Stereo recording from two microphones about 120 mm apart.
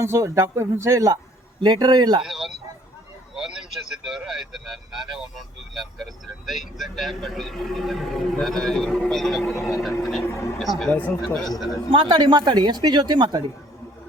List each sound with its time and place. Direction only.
0.0 s speech: 25° right (ahead or behind)
1.6 s speech: 35° right (ahead or behind)
2.2 s a sound: centre (ahead or behind)
3.3 s speech: 5° right (ahead or behind)
10.2 s speech: 20° left (ahead or behind)
10.6 s speech: centre (ahead or behind)
11.9 s speech: 45° right (ahead or behind)